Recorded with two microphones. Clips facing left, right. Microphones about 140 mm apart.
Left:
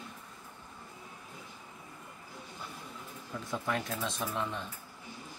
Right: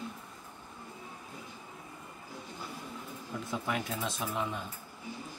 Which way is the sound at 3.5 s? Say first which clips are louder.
Even; 5° right (ahead or behind).